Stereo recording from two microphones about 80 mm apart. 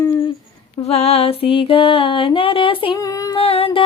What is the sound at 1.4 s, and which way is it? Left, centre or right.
Music, left.